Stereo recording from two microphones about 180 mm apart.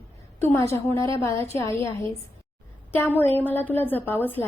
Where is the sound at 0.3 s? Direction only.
15° left (ahead or behind).